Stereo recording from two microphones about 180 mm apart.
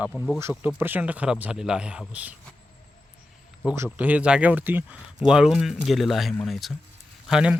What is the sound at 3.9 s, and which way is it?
Speech, 10° right (ahead or behind).